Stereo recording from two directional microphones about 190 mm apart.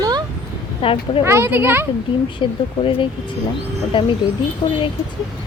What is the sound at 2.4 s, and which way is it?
Speech, 25° left (ahead or behind).